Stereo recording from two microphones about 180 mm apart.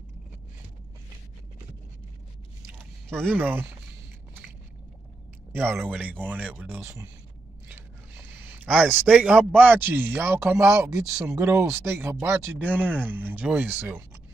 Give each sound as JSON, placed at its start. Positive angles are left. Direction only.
{"t": 3.3, "sound": "speech", "side_deg": -10}
{"t": 5.5, "sound": "speech", "side_deg": -10}
{"t": 7.6, "sound": "a sound", "side_deg": -10}
{"t": 9.6, "sound": "speech", "side_deg": -10}